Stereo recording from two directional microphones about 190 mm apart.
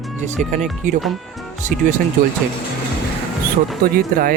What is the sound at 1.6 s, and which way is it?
Speech, 40° right (ahead or behind).